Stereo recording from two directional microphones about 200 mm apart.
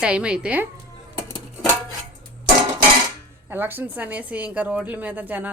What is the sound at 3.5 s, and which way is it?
A woman's voice, 10° right (ahead or behind).